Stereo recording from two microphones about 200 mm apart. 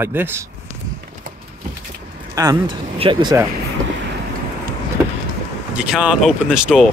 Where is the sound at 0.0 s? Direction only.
10° right (ahead or behind).